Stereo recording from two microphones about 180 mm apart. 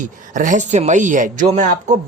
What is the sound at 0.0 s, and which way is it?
Speech, 45° right (ahead or behind).